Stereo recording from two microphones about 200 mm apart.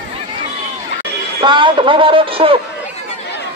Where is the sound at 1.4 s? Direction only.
25° right (ahead or behind).